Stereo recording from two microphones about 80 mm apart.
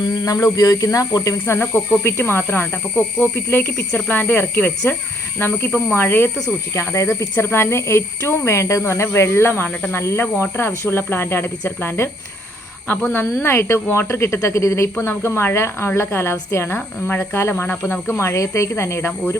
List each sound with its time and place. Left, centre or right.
0.3 s speech: left
14.9 s speech: left